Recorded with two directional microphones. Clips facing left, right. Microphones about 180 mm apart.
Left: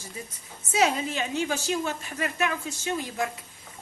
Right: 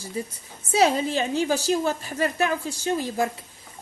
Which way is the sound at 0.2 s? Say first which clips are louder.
Right 12 dB; 30° right (ahead or behind).